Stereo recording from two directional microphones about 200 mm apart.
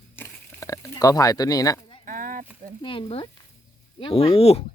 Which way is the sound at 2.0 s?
45° right (ahead or behind).